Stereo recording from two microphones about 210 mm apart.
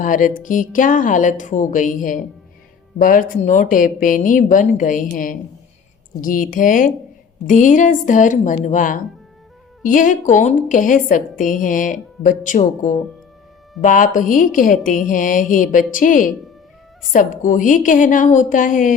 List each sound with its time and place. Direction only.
0.0 s a woman's voice: 40° left (ahead or behind)